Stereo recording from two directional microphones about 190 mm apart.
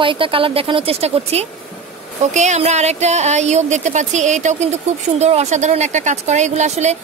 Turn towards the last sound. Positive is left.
turn(degrees=-35)  # may be behind; listen again after turning